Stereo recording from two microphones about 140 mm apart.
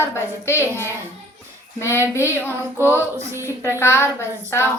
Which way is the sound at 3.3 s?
20° right (ahead or behind).